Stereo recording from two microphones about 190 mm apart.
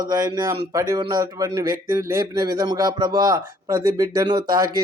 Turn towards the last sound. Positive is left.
turn(degrees=-20)  # may be behind; listen again after turning